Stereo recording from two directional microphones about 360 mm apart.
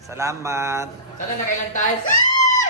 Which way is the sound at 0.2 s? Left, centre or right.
Centre.